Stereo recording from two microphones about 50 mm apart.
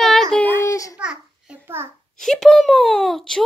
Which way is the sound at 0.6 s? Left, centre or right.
Left.